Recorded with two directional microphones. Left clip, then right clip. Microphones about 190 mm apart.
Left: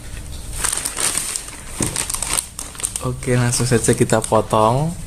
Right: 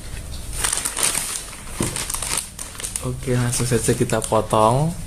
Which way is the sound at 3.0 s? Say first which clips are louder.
Left 4 dB; 15° left (ahead or behind).